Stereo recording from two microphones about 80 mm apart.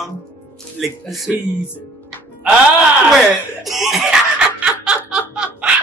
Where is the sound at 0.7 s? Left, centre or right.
Centre.